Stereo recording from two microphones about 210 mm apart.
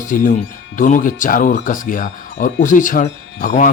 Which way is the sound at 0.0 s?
40° left (ahead or behind).